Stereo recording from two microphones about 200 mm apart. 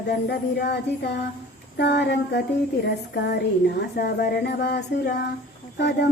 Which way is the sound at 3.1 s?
55° left (ahead or behind).